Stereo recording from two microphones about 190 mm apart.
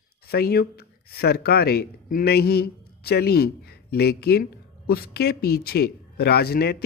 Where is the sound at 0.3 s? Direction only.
55° left (ahead or behind).